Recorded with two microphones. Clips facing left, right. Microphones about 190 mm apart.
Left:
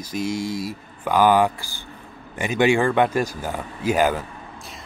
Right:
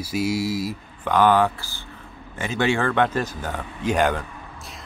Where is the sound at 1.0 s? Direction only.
10° left (ahead or behind).